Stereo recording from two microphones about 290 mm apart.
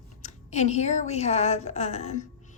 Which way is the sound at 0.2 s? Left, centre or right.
Left.